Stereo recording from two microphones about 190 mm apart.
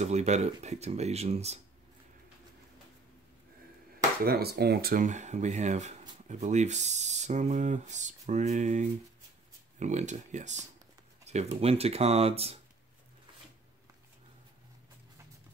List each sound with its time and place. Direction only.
0.0 s speech: 35° right (ahead or behind)
4.2 s speech: 55° right (ahead or behind); by 12.5 s 30° right (ahead or behind)